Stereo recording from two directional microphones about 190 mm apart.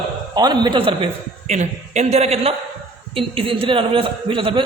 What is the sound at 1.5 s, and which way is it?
A man's voice, 35° right (ahead or behind).